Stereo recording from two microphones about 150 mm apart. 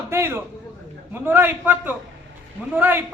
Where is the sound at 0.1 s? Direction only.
15° right (ahead or behind).